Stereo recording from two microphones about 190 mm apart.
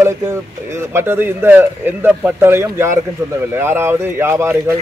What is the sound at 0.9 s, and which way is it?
Speech, 10° right (ahead or behind).